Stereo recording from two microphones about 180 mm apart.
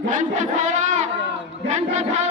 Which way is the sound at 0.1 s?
45° right (ahead or behind).